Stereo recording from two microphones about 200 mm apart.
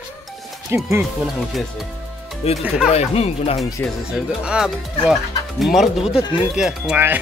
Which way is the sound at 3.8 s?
5° right (ahead or behind).